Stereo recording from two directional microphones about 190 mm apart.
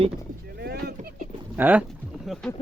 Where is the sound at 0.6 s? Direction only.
55° right (ahead or behind).